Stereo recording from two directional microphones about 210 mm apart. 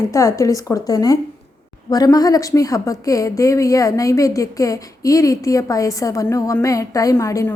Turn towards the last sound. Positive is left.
turn(degrees=15)  # may be behind; listen again after turning